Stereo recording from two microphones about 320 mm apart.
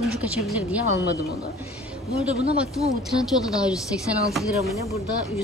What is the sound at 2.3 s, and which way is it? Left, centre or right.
Speech, centre.